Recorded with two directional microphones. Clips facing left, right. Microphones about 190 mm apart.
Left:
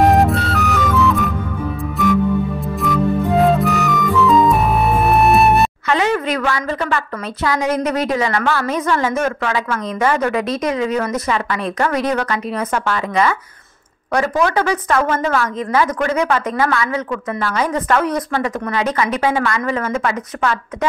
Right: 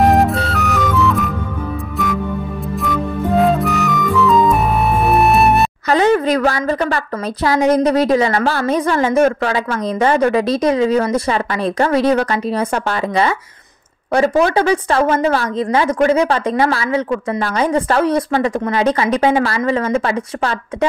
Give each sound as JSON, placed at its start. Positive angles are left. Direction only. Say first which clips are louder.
{"t": 0.0, "sound": "music", "louder": "even", "side_deg": 0}
{"t": 2.8, "sound": "music", "louder": "left 3 dB", "side_deg": 0}
{"t": 5.9, "sound": "a woman's voice", "louder": "right 4 dB", "side_deg": -35}